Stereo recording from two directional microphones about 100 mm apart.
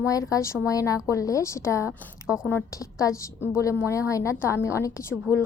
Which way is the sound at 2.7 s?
30° left (ahead or behind).